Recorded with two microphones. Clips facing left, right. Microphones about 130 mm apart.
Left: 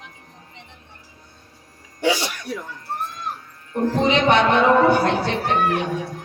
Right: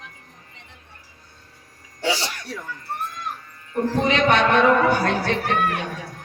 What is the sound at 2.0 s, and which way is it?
Sneeze, 15° left (ahead or behind).